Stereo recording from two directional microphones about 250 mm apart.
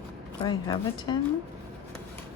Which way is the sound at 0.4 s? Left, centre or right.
Centre.